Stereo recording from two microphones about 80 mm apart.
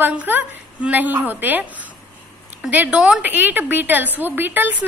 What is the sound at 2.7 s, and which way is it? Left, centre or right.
A woman's voice, centre.